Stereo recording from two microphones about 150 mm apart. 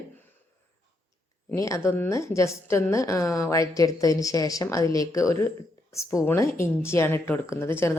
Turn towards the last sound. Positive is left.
turn(degrees=15)  # may be behind; listen again after turning